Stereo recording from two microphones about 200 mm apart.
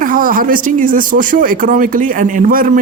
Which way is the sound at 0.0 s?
45° right (ahead or behind).